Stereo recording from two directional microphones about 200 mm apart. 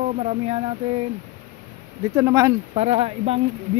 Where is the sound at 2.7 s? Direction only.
30° right (ahead or behind).